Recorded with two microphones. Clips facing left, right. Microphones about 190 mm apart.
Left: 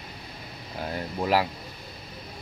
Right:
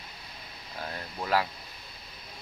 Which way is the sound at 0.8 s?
25° left (ahead or behind).